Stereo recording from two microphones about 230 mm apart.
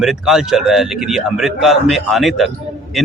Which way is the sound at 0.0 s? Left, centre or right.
Centre.